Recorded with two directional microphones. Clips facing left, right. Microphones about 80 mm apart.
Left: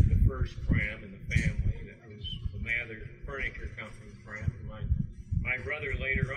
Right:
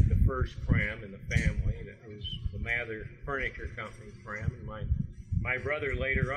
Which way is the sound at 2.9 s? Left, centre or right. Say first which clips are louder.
Right 5 dB; right.